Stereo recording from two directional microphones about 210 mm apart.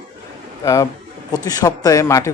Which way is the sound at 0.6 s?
15° left (ahead or behind).